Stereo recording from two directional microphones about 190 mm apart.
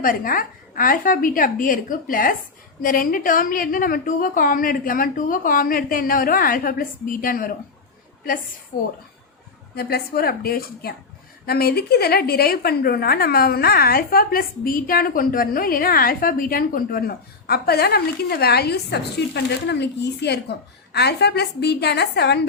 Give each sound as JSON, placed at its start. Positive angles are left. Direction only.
{"t": 0.0, "sound": "a woman's voice", "side_deg": 45}
{"t": 9.7, "sound": "a woman's voice", "side_deg": 55}